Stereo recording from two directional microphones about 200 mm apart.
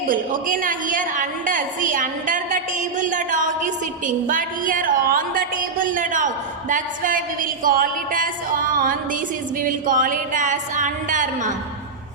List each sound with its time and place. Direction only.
0.1 s a woman's voice: 45° right (ahead or behind)